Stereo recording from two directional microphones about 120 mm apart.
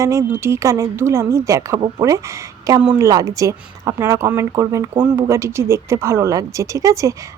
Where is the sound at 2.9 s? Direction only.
30° right (ahead or behind).